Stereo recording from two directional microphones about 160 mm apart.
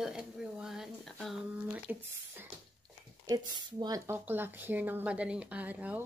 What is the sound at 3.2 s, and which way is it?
Speech, 25° right (ahead or behind).